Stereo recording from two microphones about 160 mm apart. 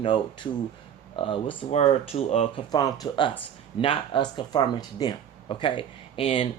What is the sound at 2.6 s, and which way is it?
Speech, 25° left (ahead or behind).